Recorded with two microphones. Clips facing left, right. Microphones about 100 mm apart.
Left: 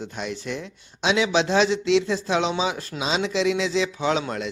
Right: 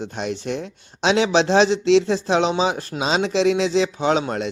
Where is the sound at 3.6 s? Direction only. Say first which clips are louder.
Right 4 dB; 65° right (ahead or behind).